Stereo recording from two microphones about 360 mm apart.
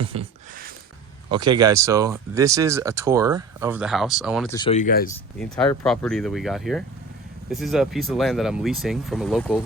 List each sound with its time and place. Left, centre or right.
0.0 s speech: centre
1.3 s speech: centre
4.5 s speech: centre
5.4 s speech: centre